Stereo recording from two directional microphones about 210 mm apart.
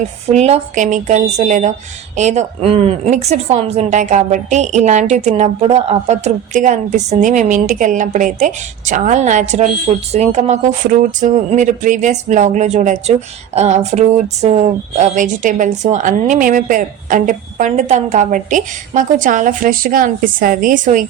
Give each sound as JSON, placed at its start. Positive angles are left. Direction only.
{"t": 0.3, "sound": "speech", "side_deg": -30}